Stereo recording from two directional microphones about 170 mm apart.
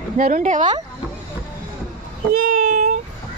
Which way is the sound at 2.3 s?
50° right (ahead or behind).